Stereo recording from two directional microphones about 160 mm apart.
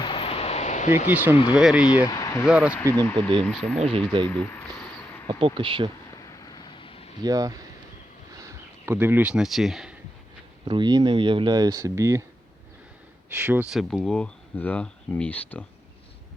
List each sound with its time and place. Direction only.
0.0 s vehicle: 35° left (ahead or behind); by 1.0 s 50° left (ahead or behind)
1.1 s speech: 10° right (ahead or behind)
2.0 s speech: 20° left (ahead or behind)
2.5 s speech: 5° right (ahead or behind)
2.7 s speech: 15° left (ahead or behind)
3.8 s speech: 35° right (ahead or behind)
4.3 s a sound: 10° left (ahead or behind)
5.3 s speech: 35° right (ahead or behind)
6.2 s vehicle: 25° left (ahead or behind)
7.2 s speech: 25° right (ahead or behind)
8.3 s a sound: 20° right (ahead or behind); by 9.9 s centre (ahead or behind)
10.7 s speech: 25° right (ahead or behind)
13.3 s speech: 10° right (ahead or behind); by 15.6 s 10° left (ahead or behind)